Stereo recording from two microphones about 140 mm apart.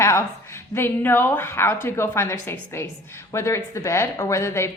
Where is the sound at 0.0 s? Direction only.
20° left (ahead or behind).